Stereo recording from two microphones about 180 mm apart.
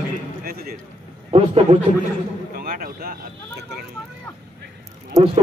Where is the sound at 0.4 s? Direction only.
60° right (ahead or behind).